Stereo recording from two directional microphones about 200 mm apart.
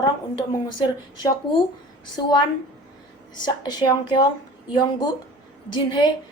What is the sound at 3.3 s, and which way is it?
A woman's voice, 20° left (ahead or behind).